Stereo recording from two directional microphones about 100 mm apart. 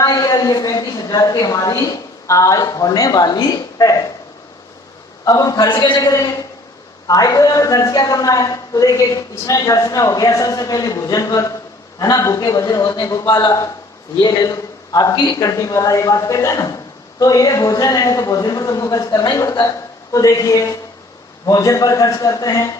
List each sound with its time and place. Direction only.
0.0 s a woman's voice: 35° left (ahead or behind)
5.2 s a woman's voice: 40° left (ahead or behind)